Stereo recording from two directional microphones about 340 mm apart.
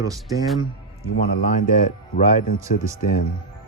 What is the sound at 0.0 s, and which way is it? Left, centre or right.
Speech, centre.